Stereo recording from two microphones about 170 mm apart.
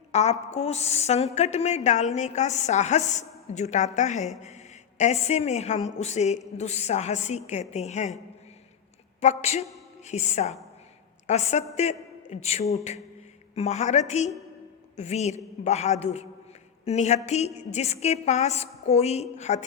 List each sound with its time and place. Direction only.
0.1 s a woman's voice: 40° left (ahead or behind)
9.2 s a woman's voice: 40° left (ahead or behind)
11.7 s a sound: 40° left (ahead or behind)
13.6 s a woman's voice: 40° left (ahead or behind)